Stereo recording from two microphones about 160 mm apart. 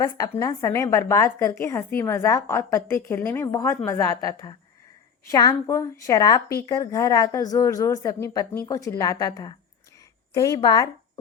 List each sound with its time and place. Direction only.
0.0 s a woman's voice: 20° left (ahead or behind)